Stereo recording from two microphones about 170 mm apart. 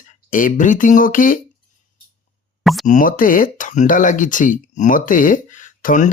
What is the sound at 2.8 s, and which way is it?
Speech, 50° left (ahead or behind).